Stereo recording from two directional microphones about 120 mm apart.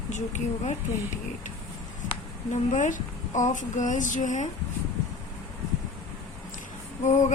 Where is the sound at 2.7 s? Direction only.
90° left.